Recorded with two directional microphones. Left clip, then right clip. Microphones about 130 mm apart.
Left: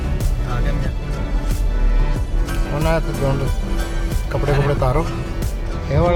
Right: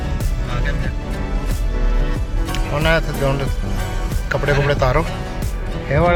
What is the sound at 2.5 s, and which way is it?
Music, centre (ahead or behind).